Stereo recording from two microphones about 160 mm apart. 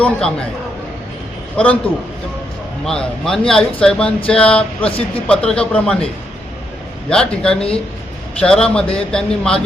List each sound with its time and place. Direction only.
0.0 s speech: 5° left (ahead or behind)
1.5 s a sound: 10° left (ahead or behind)
2.8 s speech: 5° left (ahead or behind)
4.3 s a sound: 5° left (ahead or behind)
4.9 s speech: 35° left (ahead or behind)
5.3 s speech: 5° left (ahead or behind)
7.1 s speech: 5° left (ahead or behind)